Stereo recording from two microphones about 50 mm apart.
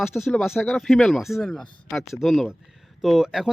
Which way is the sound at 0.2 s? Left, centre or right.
Centre.